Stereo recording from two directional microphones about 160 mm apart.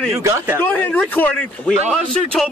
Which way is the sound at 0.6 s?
10° left (ahead or behind).